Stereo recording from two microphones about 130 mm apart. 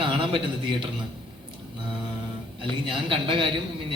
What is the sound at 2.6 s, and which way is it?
Speech, 40° right (ahead or behind).